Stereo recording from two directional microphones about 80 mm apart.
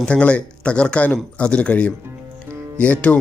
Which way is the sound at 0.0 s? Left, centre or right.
Centre.